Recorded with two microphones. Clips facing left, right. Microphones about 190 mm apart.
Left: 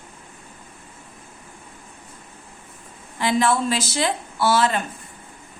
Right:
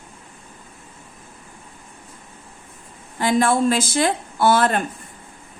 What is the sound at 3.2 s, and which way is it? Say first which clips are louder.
A woman's voice: right 3 dB; 50° right (ahead or behind).